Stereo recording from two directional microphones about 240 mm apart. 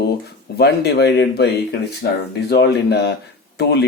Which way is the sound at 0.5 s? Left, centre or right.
Left.